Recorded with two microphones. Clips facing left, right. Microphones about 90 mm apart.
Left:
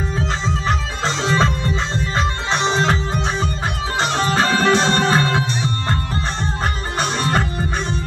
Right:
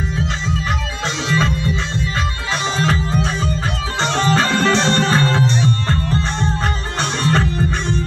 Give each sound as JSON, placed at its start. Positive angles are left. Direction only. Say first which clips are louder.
{"t": 0.2, "sound": "music", "louder": "left 1 dB", "side_deg": 35}
{"t": 4.0, "sound": "music", "louder": "right 2 dB", "side_deg": 10}
{"t": 7.0, "sound": "music", "louder": "right 1 dB", "side_deg": 15}